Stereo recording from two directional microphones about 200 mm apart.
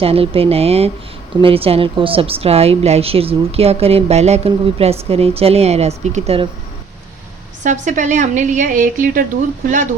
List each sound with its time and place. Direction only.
0.0 s a woman's voice: 30° right (ahead or behind)
7.6 s a woman's voice: 40° right (ahead or behind)